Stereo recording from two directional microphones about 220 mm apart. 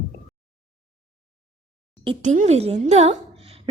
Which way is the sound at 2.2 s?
30° right (ahead or behind).